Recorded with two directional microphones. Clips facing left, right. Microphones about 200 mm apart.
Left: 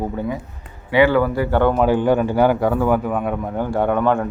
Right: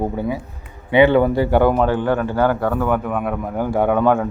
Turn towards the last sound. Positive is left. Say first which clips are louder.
# right 2 dB
turn(degrees=-10)  # may be behind; listen again after turning